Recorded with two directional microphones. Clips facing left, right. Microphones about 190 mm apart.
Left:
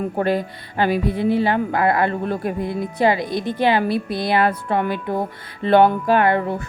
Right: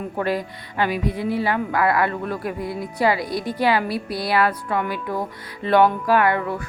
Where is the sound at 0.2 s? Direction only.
30° left (ahead or behind).